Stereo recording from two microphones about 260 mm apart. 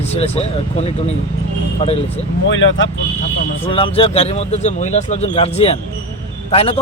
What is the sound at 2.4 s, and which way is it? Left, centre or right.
Speech, left.